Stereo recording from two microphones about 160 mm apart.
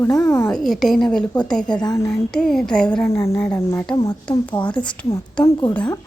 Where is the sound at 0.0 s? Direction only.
15° left (ahead or behind).